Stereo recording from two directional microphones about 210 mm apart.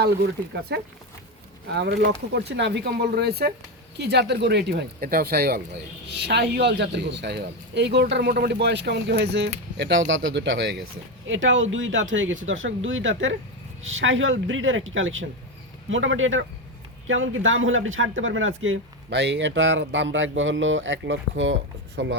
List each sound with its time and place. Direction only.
0.7 s speech: 50° right (ahead or behind)